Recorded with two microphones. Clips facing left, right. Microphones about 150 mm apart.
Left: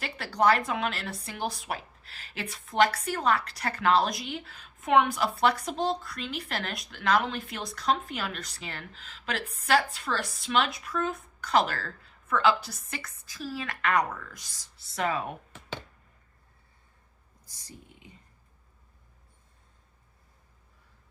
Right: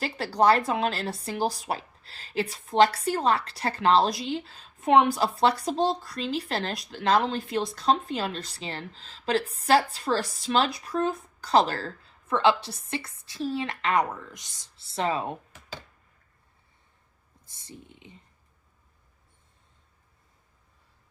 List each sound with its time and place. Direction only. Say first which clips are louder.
0.0 s a woman's voice: right 3 dB; 30° right (ahead or behind)
17.4 s speech: right 4 dB; 25° right (ahead or behind)